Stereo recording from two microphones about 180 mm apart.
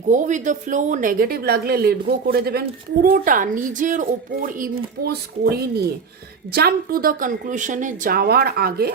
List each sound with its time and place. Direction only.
0.1 s a woman's voice: 45° right (ahead or behind)
5.0 s a woman's voice: 60° right (ahead or behind)